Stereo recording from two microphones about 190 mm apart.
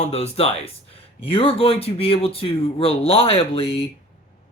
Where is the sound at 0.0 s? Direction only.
35° left (ahead or behind).